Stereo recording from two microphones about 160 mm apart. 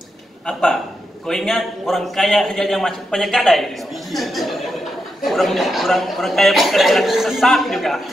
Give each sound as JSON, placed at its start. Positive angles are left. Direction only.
{"t": 0.5, "sound": "a man's voice", "side_deg": 0}